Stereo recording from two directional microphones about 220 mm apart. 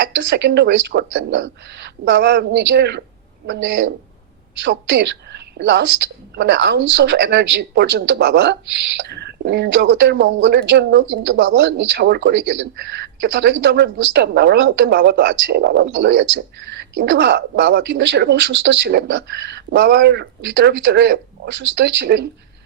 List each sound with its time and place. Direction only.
0.0 s a man's voice: 55° right (ahead or behind)